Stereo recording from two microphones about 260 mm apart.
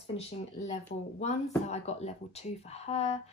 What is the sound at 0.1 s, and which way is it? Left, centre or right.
Speech, left.